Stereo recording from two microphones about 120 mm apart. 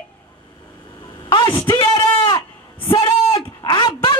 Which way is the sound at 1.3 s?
40° left (ahead or behind).